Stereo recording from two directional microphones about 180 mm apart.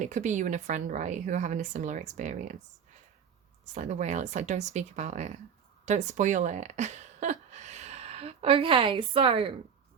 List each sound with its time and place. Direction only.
0.0 s speech: 45° right (ahead or behind)
3.8 s speech: 40° right (ahead or behind)